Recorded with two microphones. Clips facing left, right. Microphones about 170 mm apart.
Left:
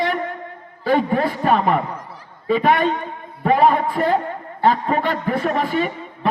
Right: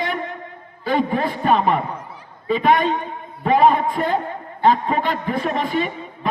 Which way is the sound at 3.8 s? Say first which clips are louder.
Left 2 dB; 35° left (ahead or behind).